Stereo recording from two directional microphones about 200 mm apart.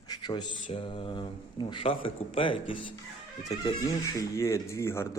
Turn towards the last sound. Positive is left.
turn(degrees=15)  # may be behind; listen again after turning